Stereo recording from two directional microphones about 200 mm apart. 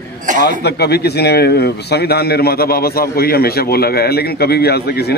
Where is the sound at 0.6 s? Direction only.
55° left (ahead or behind).